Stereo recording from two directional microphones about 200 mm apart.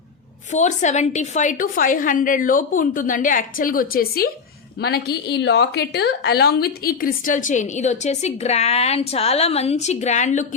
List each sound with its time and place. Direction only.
0.5 s a woman's voice: 35° left (ahead or behind)